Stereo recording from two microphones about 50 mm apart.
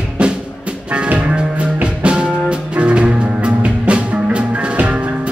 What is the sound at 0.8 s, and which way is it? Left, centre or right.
Music, right.